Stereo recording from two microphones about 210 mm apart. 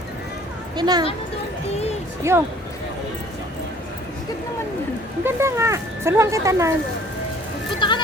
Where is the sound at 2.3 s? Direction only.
15° right (ahead or behind).